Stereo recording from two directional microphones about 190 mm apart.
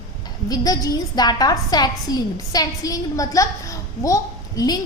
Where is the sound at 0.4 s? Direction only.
20° left (ahead or behind).